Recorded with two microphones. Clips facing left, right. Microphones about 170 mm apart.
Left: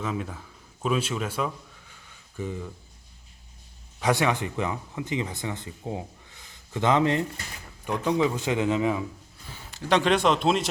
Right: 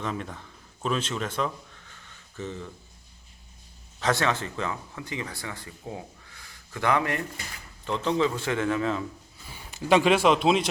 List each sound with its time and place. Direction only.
0.0 s speech: 5° left (ahead or behind)
4.0 s a man's voice: 15° left (ahead or behind)
9.5 s a man's voice: 10° right (ahead or behind)